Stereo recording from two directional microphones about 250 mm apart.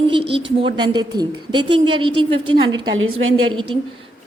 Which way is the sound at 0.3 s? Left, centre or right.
Right.